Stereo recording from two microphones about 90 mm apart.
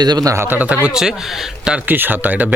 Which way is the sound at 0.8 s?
5° right (ahead or behind).